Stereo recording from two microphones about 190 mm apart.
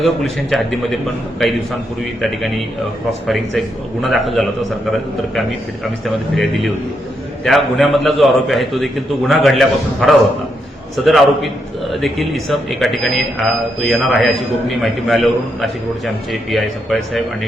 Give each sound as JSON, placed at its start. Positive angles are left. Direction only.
{"t": 0.0, "sound": "a man's voice", "side_deg": 0}
{"t": 2.2, "sound": "a man's voice", "side_deg": 0}
{"t": 6.3, "sound": "a man's voice", "side_deg": 0}